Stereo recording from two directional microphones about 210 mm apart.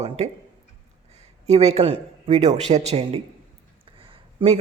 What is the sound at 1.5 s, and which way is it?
A man's voice, 30° right (ahead or behind).